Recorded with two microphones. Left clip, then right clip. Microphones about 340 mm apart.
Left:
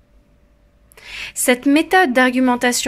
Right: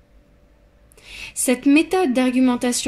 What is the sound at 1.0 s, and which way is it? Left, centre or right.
Speech, left.